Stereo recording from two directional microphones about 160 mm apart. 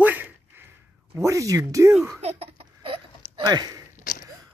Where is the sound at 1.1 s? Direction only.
20° right (ahead or behind).